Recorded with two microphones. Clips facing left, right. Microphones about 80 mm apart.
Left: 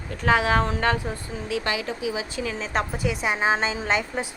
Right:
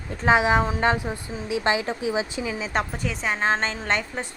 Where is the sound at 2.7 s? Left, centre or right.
Centre.